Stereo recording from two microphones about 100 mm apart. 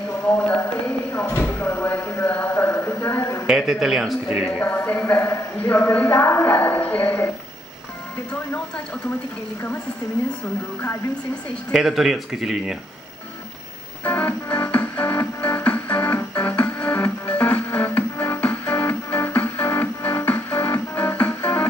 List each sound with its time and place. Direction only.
0.6 s a sound: 25° left (ahead or behind)
3.4 s speech: 5° right (ahead or behind)
4.5 s speech: 15° left (ahead or behind)
11.7 s speech: 5° right (ahead or behind)
14.0 s music: 20° left (ahead or behind)